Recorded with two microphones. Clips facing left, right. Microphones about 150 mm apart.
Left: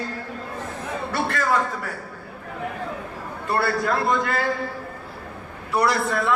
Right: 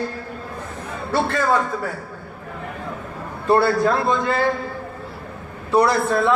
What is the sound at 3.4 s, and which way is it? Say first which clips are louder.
A man's voice: right 7 dB; 25° right (ahead or behind).